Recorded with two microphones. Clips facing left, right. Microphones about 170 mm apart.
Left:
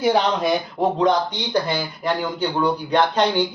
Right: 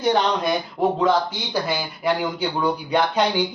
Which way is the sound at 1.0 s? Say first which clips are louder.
Left 1 dB; 5° right (ahead or behind).